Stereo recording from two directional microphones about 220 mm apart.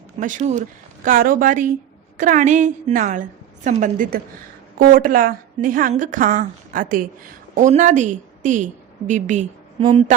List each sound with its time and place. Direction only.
0.2 s a woman's voice: 35° right (ahead or behind)